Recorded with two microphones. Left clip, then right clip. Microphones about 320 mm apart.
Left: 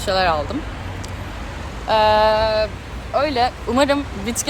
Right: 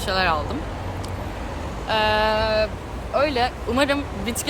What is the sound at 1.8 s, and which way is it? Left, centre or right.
Speech, centre.